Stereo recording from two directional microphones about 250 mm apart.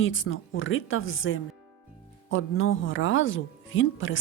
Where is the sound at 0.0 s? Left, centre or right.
Left.